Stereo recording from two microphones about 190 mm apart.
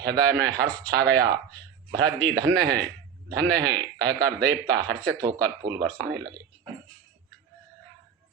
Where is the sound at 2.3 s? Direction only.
60° right (ahead or behind).